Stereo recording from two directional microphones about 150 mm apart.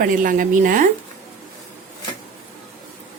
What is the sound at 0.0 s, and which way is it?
Speech, 65° right (ahead or behind).